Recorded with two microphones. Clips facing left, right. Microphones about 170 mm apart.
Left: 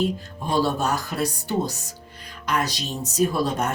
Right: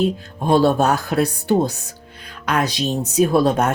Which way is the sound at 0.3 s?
60° right (ahead or behind).